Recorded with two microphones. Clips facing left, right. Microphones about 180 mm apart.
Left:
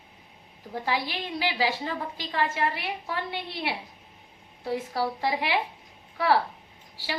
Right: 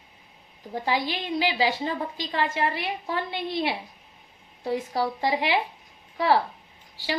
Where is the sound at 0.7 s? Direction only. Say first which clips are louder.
Right 3 dB; 20° right (ahead or behind).